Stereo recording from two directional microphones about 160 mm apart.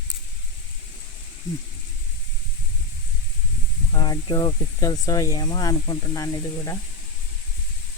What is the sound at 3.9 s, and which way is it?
Speech, 25° left (ahead or behind).